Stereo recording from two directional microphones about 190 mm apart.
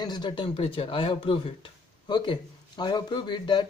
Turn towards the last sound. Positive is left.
turn(degrees=25)  # may be behind; listen again after turning